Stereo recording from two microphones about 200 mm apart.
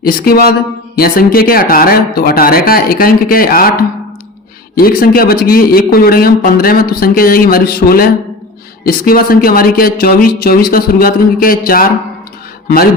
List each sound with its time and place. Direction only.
0.0 s a man's voice: 45° left (ahead or behind)
4.7 s a man's voice: 45° left (ahead or behind)